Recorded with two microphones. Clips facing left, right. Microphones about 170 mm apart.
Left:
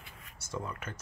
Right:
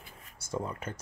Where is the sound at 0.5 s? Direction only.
30° right (ahead or behind).